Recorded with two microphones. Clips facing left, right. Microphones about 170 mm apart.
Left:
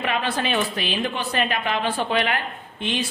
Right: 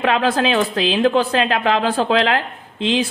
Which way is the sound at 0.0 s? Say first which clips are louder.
Right 7 dB; 90° right.